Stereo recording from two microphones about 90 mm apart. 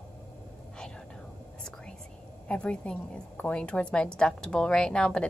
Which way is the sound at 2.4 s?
10° left (ahead or behind).